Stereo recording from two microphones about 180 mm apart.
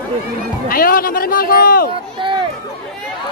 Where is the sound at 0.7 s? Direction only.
55° left (ahead or behind).